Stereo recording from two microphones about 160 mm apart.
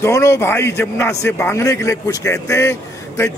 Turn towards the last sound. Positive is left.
turn(degrees=20)  # may be behind; listen again after turning